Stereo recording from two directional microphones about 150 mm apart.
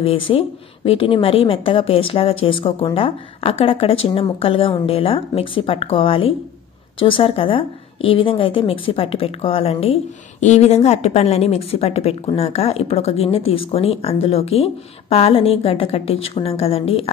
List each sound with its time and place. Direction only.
0.0 s a woman's voice: 40° left (ahead or behind)